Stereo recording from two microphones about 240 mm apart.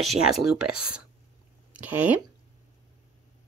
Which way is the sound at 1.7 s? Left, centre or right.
Centre.